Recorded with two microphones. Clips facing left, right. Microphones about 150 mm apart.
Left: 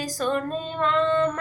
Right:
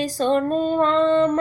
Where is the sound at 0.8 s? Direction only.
30° right (ahead or behind).